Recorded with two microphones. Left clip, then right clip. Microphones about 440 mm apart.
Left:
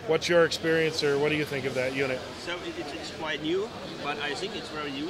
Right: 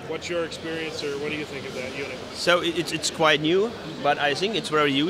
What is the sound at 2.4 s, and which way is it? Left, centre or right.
A man's voice, right.